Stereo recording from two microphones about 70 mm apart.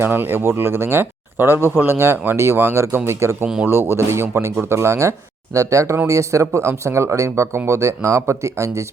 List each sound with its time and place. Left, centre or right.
0.0 s speech: right
3.4 s a man's voice: centre
3.7 s speech: right